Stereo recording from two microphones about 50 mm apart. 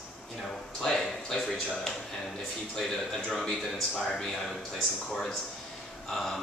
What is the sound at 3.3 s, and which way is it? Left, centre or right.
Speech, centre.